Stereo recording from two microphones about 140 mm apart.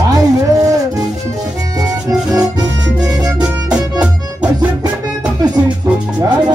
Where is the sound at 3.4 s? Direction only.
10° right (ahead or behind).